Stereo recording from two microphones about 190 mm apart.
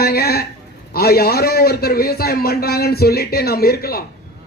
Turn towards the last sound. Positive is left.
turn(degrees=55)  # may be behind; listen again after turning